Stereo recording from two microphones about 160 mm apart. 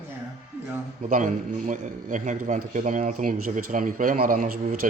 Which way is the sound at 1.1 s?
55° right (ahead or behind).